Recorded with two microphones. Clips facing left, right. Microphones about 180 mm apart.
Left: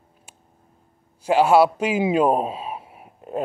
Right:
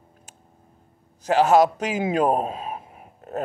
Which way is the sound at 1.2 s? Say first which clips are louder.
Left 1 dB; 40° right (ahead or behind).